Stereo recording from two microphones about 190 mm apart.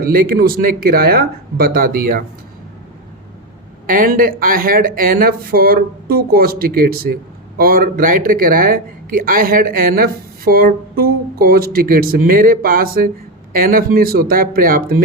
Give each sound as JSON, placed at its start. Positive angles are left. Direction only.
{"t": 0.0, "sound": "speech", "side_deg": -50}
{"t": 3.8, "sound": "speech", "side_deg": -45}